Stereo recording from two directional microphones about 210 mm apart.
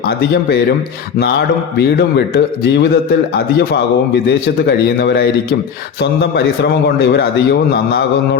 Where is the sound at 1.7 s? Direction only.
50° left (ahead or behind).